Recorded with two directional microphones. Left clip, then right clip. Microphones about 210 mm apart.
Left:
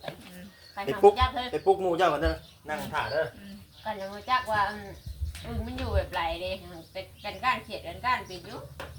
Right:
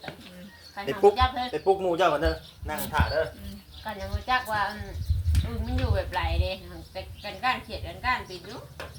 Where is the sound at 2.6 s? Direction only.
20° right (ahead or behind).